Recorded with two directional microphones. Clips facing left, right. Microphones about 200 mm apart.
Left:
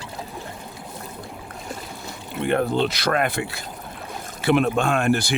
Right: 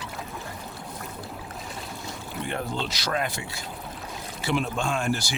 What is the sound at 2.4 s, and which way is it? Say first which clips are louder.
Speech: left 11 dB; 60° left (ahead or behind).